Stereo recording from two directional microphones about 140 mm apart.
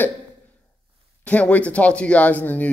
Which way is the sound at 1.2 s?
10° left (ahead or behind).